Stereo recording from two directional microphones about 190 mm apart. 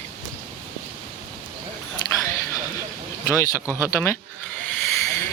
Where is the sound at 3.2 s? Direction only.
15° left (ahead or behind).